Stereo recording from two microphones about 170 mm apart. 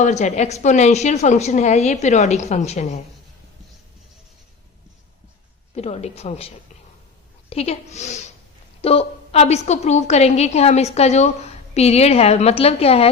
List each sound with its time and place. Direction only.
0.0 s a woman's voice: 45° left (ahead or behind)
5.7 s a woman's voice: 40° left (ahead or behind)
7.5 s a woman's voice: 35° left (ahead or behind)